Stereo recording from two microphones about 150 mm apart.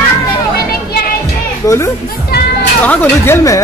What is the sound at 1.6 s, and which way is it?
Speech, 20° left (ahead or behind).